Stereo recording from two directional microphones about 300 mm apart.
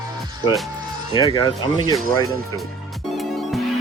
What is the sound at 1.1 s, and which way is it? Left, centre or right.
Speech, centre.